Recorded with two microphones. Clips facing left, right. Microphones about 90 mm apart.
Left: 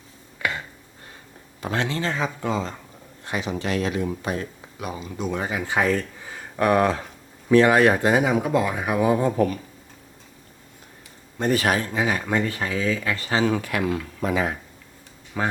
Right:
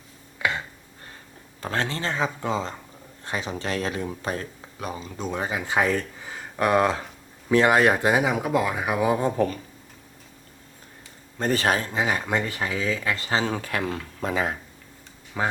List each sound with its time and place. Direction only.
1.6 s speech: 40° right (ahead or behind); by 7.9 s 20° right (ahead or behind)
7.9 s speech: 5° right (ahead or behind)
11.3 s speech: 35° right (ahead or behind)
12.6 s speech: 15° right (ahead or behind); by 14.5 s 35° right (ahead or behind)
15.3 s speech: centre (ahead or behind)